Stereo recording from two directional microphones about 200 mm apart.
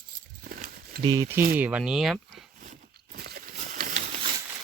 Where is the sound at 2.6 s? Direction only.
40° right (ahead or behind).